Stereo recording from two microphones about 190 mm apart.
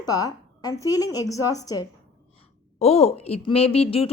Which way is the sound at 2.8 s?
30° left (ahead or behind).